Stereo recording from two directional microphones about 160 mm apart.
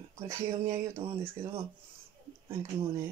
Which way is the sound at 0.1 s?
20° right (ahead or behind).